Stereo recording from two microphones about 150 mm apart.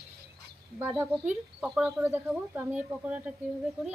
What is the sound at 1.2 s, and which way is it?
Speech, 5° right (ahead or behind).